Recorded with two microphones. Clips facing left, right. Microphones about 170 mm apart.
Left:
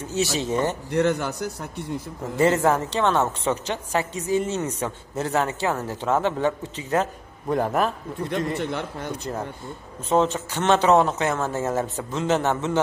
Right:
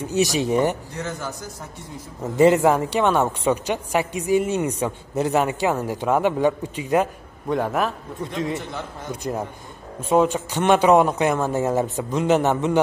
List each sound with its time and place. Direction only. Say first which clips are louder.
0.0 s a woman's voice: right 4 dB; 15° right (ahead or behind)
0.9 s speech: left 8 dB; 65° left (ahead or behind)
2.3 s a woman's voice: right 4 dB; 15° right (ahead or behind)
7.4 s a man's voice: even; centre (ahead or behind)
8.5 s a man's voice: left 4 dB; 65° left (ahead or behind)
9.1 s a woman's voice: right 7 dB; 15° right (ahead or behind)